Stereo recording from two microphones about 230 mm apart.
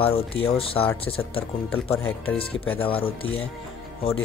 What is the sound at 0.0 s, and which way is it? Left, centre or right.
Speech, left.